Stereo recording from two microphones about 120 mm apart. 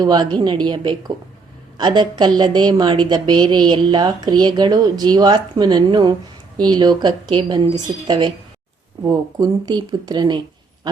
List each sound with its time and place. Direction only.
0.0 s a woman's voice: 35° right (ahead or behind)